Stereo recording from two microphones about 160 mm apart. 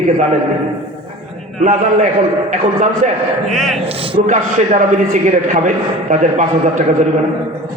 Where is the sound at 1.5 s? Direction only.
50° right (ahead or behind).